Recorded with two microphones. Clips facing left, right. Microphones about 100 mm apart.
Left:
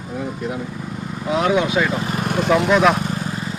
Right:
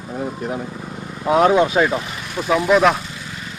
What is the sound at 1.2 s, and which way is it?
Speech, 40° right (ahead or behind).